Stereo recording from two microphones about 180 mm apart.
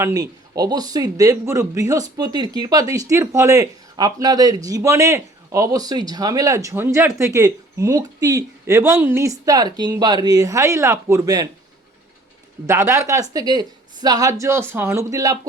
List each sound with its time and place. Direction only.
0.0 s speech: 20° right (ahead or behind)
12.6 s speech: 15° right (ahead or behind)